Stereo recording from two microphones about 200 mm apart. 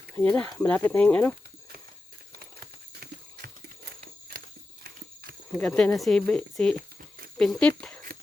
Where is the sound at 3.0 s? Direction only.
55° right (ahead or behind).